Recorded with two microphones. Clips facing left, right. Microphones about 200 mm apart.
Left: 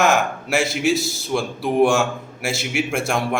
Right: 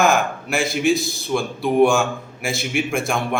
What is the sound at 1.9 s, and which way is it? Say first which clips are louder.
Speech: even; 75° left (ahead or behind).